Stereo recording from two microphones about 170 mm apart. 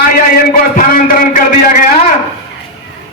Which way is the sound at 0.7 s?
55° left (ahead or behind).